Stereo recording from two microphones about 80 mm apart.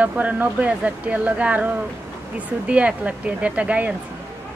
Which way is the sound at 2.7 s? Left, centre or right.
Centre.